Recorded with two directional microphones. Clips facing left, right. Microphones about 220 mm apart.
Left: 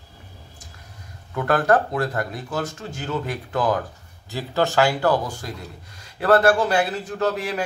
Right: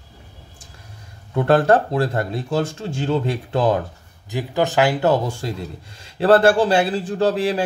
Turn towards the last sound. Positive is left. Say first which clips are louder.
# right 5 dB
turn(degrees=-30)  # may be behind; listen again after turning